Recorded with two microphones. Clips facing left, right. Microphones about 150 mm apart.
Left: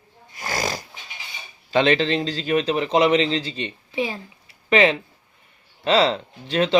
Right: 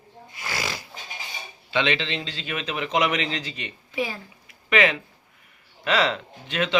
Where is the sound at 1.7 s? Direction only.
40° left (ahead or behind).